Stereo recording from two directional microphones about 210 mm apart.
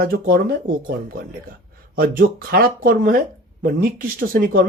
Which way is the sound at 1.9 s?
45° right (ahead or behind).